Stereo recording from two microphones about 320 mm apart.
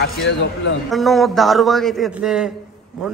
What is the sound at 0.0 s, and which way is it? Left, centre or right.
Speech, left.